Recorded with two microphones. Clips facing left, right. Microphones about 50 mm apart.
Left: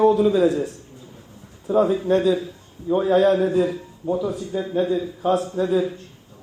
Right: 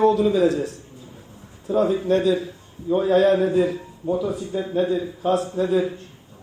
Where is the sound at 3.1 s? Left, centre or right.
Left.